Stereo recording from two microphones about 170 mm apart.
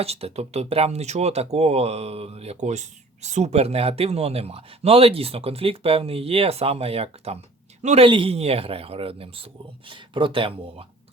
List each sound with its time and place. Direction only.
0.0 s speech: 35° right (ahead or behind)
8.0 s speech: 30° right (ahead or behind)